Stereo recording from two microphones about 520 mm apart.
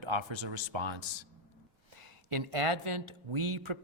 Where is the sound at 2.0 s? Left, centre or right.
Right.